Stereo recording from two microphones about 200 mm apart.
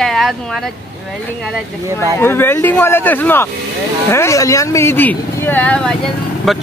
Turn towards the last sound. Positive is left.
turn(degrees=5)  # may be behind; listen again after turning